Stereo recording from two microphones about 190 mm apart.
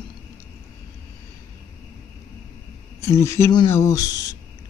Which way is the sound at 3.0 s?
15° left (ahead or behind).